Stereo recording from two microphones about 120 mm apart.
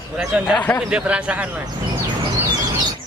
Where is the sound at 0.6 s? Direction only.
15° left (ahead or behind).